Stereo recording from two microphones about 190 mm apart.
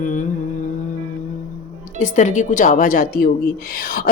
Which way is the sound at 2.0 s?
40° left (ahead or behind).